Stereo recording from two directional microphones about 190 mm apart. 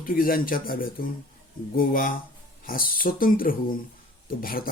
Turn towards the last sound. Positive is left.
turn(degrees=50)  # may be behind; listen again after turning